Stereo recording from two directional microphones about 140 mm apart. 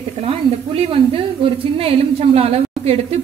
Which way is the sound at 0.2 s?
45° right (ahead or behind).